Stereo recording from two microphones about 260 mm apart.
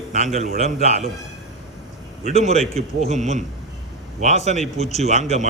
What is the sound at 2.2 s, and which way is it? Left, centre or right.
Speech, right.